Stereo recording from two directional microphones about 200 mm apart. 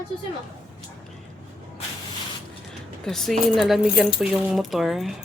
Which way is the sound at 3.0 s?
Centre (ahead or behind).